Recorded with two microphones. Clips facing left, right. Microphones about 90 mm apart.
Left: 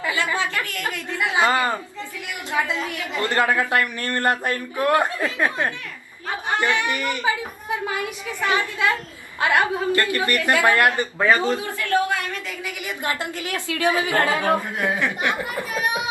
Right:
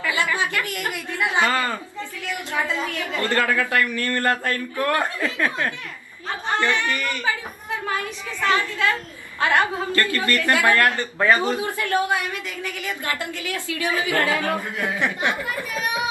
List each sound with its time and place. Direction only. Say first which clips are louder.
1.4 s a woman's voice: left 4 dB; 20° left (ahead or behind)
11.3 s a man's voice: even; 20° right (ahead or behind)
12.6 s a woman's voice: left 1 dB; 20° left (ahead or behind)
15.0 s a man's voice: even; 20° right (ahead or behind)
15.3 s a woman's voice: left 1 dB; 20° left (ahead or behind)